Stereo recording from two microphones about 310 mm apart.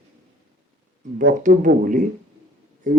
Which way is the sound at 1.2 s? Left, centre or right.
Right.